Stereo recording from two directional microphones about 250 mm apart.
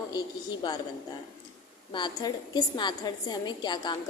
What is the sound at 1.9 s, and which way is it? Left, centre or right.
A woman's voice, centre.